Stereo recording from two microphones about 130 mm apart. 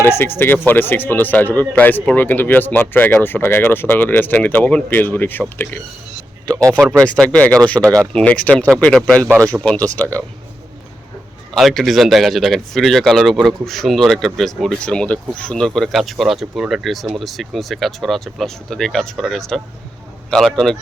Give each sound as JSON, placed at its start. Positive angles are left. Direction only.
{"t": 0.0, "sound": "speech", "side_deg": 20}
{"t": 7.8, "sound": "speech", "side_deg": -25}
{"t": 8.1, "sound": "speech", "side_deg": 10}
{"t": 9.2, "sound": "speech", "side_deg": -25}
{"t": 9.5, "sound": "speech", "side_deg": 10}
{"t": 11.5, "sound": "speech", "side_deg": 0}